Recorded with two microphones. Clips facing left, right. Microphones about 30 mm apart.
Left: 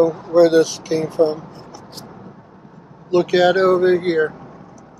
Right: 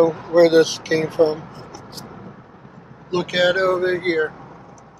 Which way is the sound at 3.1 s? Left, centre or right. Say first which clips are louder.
Left 4 dB; centre.